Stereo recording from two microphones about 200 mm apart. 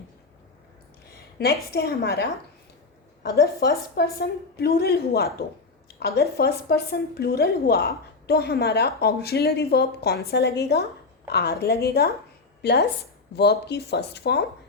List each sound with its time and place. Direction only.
1.4 s a woman's voice: 50° left (ahead or behind)
3.2 s a woman's voice: 55° left (ahead or behind)